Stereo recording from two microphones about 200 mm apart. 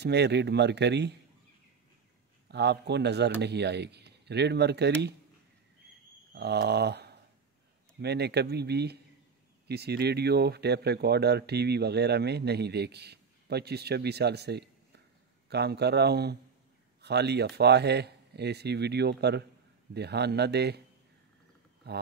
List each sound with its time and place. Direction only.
0.0 s speech: 55° right (ahead or behind)
2.4 s speech: 55° right (ahead or behind)
6.3 s a sound: 55° right (ahead or behind)
8.0 s speech: 55° right (ahead or behind)
21.8 s speech: 55° right (ahead or behind)